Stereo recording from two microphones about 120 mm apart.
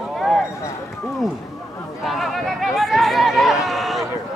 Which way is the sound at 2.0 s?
Centre (ahead or behind).